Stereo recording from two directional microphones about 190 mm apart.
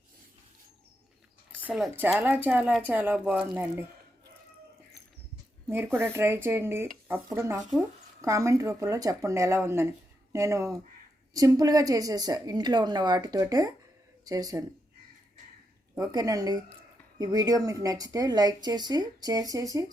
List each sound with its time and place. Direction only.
1.6 s speech: 5° right (ahead or behind)
6.0 s speech: 15° right (ahead or behind)
16.0 s speech: 20° right (ahead or behind)